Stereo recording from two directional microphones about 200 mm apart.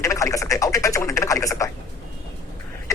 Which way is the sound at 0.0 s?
15° left (ahead or behind).